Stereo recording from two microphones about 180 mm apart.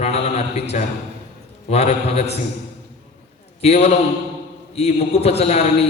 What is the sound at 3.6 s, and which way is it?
A man's voice, 35° left (ahead or behind).